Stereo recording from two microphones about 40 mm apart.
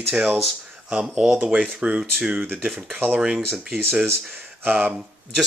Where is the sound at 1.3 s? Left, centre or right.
Right.